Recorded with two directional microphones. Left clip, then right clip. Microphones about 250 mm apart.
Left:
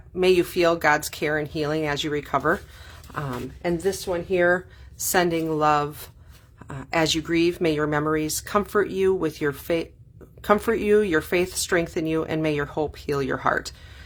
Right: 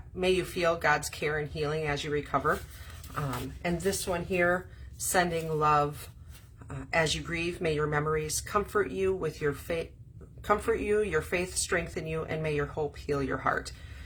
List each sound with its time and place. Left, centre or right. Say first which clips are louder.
0.2 s speech: left 9 dB; left
6.9 s speech: left 7 dB; left